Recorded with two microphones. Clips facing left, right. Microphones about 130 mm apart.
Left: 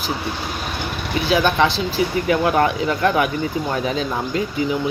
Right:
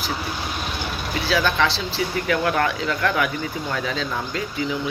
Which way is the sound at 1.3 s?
20° left (ahead or behind).